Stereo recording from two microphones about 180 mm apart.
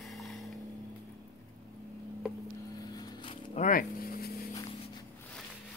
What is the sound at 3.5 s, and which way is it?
Vehicle, 50° left (ahead or behind).